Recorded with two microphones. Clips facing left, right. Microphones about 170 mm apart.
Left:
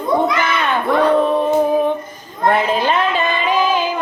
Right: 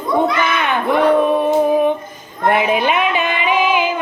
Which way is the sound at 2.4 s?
15° right (ahead or behind).